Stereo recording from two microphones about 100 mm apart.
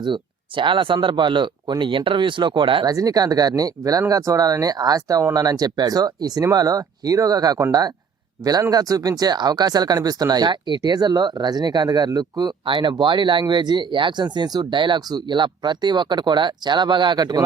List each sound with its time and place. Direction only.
0.0 s speech: 55° right (ahead or behind)
2.8 s speech: 40° right (ahead or behind)